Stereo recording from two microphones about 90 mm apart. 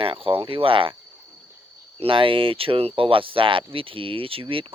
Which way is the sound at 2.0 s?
80° right.